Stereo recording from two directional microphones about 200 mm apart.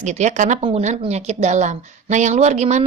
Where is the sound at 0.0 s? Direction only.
35° right (ahead or behind).